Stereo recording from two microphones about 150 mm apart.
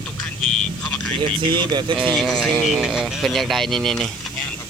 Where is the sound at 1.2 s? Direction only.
35° right (ahead or behind).